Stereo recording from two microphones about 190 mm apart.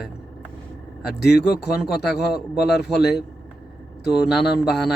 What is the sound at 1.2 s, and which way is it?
Speech, 60° left (ahead or behind).